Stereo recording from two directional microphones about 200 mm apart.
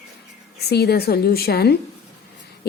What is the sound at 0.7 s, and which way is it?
A woman's voice, 55° left (ahead or behind).